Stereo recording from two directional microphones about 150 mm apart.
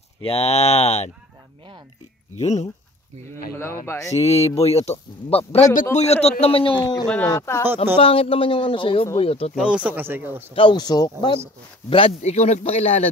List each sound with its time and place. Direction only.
0.2 s speech: 40° left (ahead or behind)
2.3 s speech: 50° left (ahead or behind)
3.8 s speech: 20° left (ahead or behind)
4.2 s speech: 45° left (ahead or behind)
7.2 s speech: 20° left (ahead or behind)
7.6 s speech: 15° right (ahead or behind)
8.0 s speech: 40° left (ahead or behind)
9.6 s speech: 10° right (ahead or behind)
10.5 s speech: 35° left (ahead or behind)
12.2 s speech: 45° left (ahead or behind)